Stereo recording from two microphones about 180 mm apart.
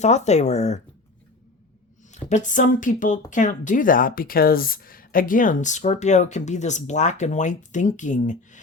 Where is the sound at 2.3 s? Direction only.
45° left (ahead or behind).